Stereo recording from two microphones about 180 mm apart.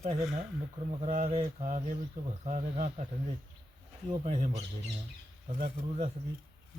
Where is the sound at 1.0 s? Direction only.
45° right (ahead or behind).